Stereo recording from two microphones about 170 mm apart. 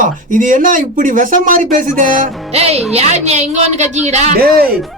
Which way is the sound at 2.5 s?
35° right (ahead or behind).